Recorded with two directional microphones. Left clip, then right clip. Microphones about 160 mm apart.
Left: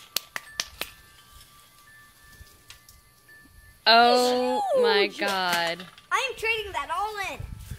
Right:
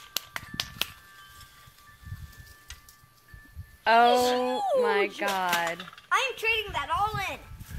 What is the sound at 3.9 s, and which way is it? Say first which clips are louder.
A woman's voice: left 2 dB; 30° left (ahead or behind).